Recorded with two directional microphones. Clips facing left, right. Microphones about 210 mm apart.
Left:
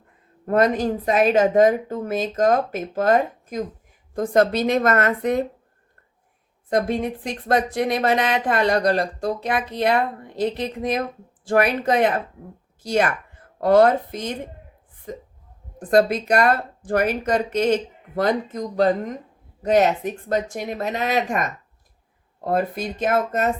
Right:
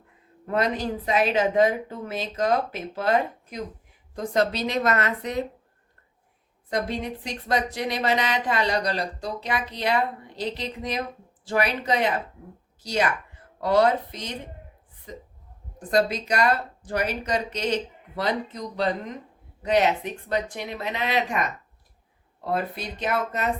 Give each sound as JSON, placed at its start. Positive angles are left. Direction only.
{"t": 0.4, "sound": "speech", "side_deg": 50}
{"t": 6.7, "sound": "speech", "side_deg": 50}